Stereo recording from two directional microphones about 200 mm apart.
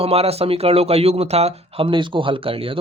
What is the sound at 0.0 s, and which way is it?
Speech, 30° right (ahead or behind).